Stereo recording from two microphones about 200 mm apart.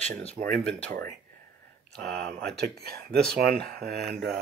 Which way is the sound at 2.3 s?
55° right (ahead or behind).